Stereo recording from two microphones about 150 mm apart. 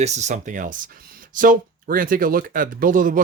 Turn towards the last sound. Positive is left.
turn(degrees=-65)  # may be behind; listen again after turning